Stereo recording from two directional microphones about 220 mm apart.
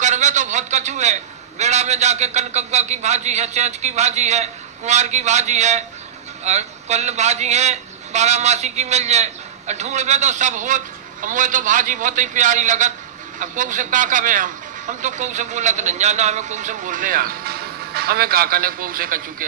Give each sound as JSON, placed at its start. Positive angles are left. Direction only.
{"t": 0.0, "sound": "a man's voice", "side_deg": -35}